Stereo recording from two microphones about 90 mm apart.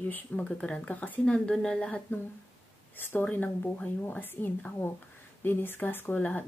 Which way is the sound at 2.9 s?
25° left (ahead or behind).